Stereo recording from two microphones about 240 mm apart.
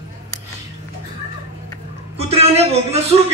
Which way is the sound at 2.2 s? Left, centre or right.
Right.